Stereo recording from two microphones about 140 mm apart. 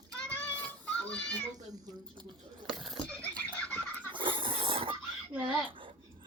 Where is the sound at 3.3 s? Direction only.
10° left (ahead or behind).